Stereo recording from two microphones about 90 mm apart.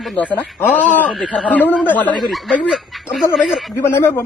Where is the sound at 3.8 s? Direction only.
30° left (ahead or behind).